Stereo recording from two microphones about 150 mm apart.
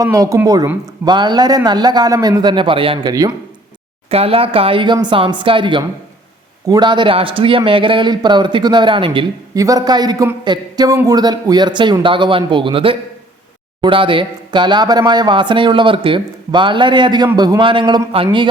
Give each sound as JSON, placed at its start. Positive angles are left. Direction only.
{"t": 0.0, "sound": "a man's voice", "side_deg": -20}
{"t": 3.1, "sound": "a man's voice", "side_deg": -25}
{"t": 4.1, "sound": "speech", "side_deg": -40}
{"t": 9.6, "sound": "a man's voice", "side_deg": -25}